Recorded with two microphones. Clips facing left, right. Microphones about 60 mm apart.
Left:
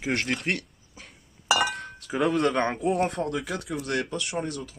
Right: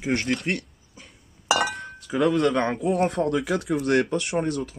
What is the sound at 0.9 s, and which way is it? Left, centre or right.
Chink, centre.